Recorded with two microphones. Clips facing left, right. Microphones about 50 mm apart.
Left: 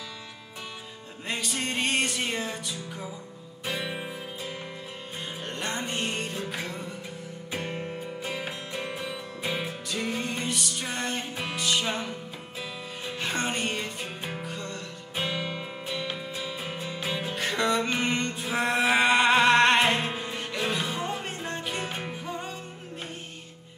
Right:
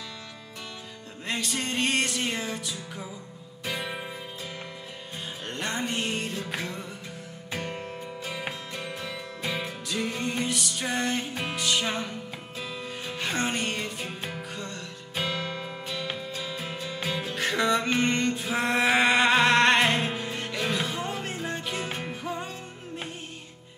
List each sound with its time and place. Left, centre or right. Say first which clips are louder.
1.2 s music: right 1 dB; centre
5.4 s music: right 2 dB; centre
9.8 s music: right 2 dB; centre
15.1 s music: even; centre